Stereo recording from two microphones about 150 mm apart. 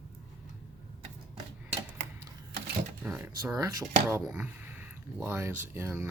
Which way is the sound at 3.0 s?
10° right (ahead or behind).